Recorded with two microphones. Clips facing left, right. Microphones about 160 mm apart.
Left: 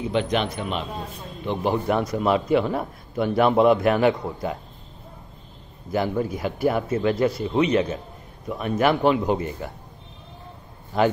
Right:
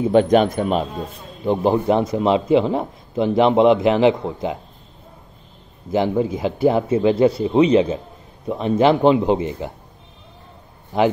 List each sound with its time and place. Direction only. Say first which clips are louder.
0.1 s speech: right 10 dB; 45° right (ahead or behind)
1.4 s a man's voice: right 6 dB; 35° right (ahead or behind)
5.9 s a man's voice: right 5 dB; 20° right (ahead or behind)
10.9 s a man's voice: right 3 dB; 15° right (ahead or behind)